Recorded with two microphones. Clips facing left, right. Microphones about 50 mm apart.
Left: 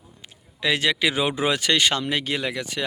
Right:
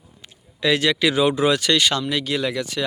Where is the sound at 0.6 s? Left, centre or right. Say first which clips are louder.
Right 3 dB; centre.